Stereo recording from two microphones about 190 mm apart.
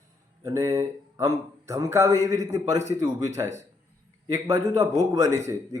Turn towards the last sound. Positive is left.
turn(degrees=-15)  # may be behind; listen again after turning